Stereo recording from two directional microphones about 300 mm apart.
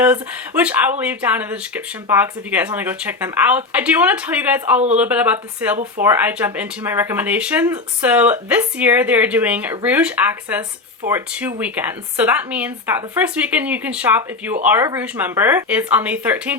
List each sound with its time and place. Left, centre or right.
0.0 s speech: centre